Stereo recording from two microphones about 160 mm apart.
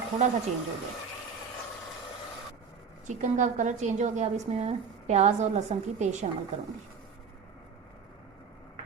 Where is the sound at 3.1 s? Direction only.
50° right (ahead or behind).